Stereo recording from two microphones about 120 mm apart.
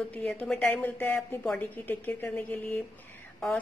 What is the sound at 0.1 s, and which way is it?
A woman's voice, 10° left (ahead or behind).